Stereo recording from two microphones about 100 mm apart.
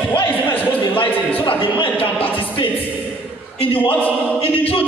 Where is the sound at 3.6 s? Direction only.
65° left (ahead or behind).